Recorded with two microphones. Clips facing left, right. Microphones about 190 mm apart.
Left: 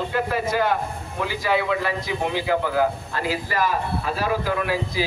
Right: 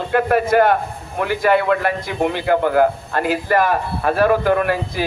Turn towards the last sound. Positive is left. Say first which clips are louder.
# right 4 dB
turn(degrees=-55)  # may be behind; listen again after turning